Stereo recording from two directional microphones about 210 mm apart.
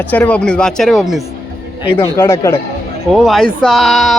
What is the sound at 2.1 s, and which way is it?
Speech, 10° left (ahead or behind).